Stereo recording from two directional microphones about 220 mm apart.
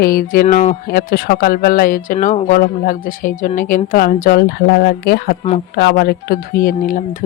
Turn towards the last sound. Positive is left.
turn(degrees=40)  # may be behind; listen again after turning